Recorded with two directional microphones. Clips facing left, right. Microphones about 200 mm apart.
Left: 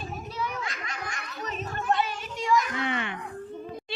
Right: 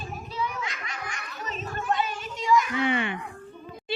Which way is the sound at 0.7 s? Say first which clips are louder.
Left 1 dB; 40° left (ahead or behind).